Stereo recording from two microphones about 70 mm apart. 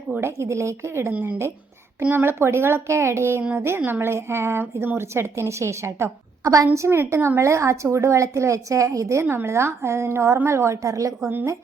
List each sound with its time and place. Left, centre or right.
0.2 s a woman's voice: right
2.0 s speech: right
6.7 s speech: right